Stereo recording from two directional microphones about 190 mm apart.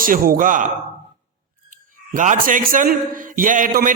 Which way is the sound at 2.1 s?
45° right (ahead or behind).